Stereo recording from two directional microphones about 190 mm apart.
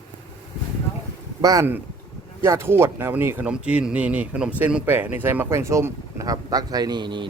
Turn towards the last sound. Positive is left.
turn(degrees=-25)  # may be behind; listen again after turning